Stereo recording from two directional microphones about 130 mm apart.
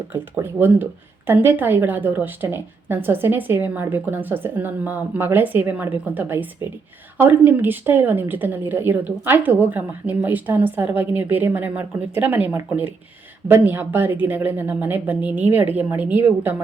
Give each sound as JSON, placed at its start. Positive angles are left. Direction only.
{"t": 0.1, "sound": "a woman's voice", "side_deg": -15}